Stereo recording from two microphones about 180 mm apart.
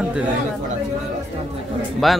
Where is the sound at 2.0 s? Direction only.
Centre (ahead or behind).